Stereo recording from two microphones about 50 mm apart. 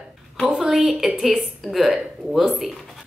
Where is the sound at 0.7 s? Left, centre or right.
Centre.